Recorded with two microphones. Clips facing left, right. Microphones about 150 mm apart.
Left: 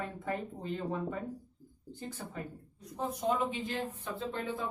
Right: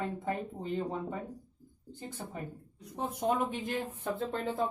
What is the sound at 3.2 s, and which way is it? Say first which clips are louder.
Speech: right 1 dB; 55° right (ahead or behind).